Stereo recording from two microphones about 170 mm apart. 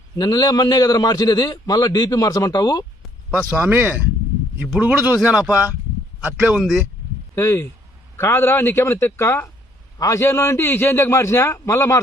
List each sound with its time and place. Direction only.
0.2 s a man's voice: 20° left (ahead or behind)
3.3 s speech: 10° right (ahead or behind)
7.3 s a man's voice: 15° left (ahead or behind)